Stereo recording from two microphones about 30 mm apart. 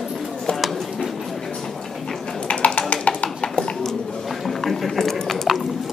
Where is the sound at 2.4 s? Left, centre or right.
Left.